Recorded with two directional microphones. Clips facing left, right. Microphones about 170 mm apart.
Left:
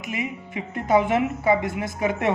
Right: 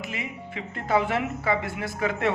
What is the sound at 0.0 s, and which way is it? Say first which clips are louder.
Speech: left 4 dB; 15° left (ahead or behind).